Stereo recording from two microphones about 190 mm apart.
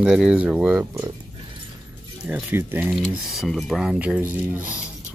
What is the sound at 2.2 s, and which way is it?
Speech, 10° right (ahead or behind).